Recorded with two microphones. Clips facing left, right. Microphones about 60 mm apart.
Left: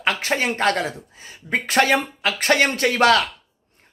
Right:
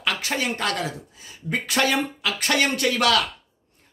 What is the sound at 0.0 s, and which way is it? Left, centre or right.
Speech, left.